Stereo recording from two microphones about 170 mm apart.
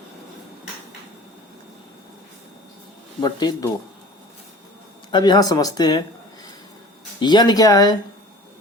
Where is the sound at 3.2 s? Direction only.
25° left (ahead or behind).